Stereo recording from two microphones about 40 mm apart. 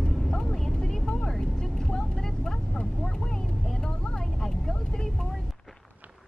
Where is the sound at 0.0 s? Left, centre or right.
Centre.